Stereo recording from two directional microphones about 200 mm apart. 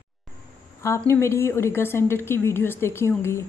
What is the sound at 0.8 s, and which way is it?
Speech, 15° left (ahead or behind).